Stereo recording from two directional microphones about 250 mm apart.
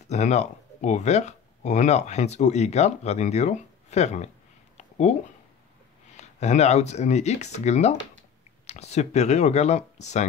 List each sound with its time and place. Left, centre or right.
0.1 s speech: left
4.7 s a sound: left
6.1 s speech: left